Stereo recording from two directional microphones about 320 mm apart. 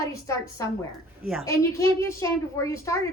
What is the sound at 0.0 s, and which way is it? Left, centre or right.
Speech, centre.